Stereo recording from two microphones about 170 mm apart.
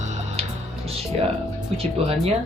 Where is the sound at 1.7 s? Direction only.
35° right (ahead or behind).